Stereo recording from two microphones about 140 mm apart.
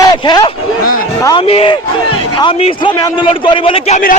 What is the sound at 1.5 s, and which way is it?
A man's voice, 45° left (ahead or behind).